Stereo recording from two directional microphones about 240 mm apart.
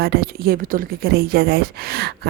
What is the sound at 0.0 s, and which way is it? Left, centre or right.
A woman's voice, right.